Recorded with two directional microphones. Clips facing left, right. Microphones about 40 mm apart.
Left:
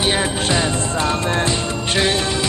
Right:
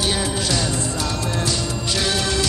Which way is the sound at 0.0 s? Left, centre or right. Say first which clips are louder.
Left 3 dB; left.